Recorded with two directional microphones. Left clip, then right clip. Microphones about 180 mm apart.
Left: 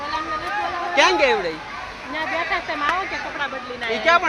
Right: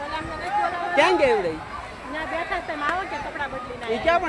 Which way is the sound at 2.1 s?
45° left (ahead or behind).